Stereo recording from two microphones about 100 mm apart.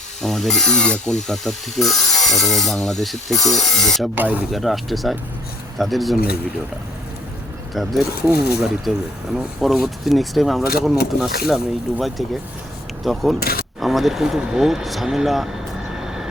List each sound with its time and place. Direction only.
0.2 s speech: 5° left (ahead or behind)
4.1 s speech: 15° right (ahead or behind)
4.5 s speech: centre (ahead or behind)
7.7 s speech: centre (ahead or behind)
16.0 s vehicle: 5° right (ahead or behind)